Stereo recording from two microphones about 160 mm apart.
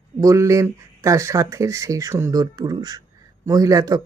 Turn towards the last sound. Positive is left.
turn(degrees=-20)  # may be behind; listen again after turning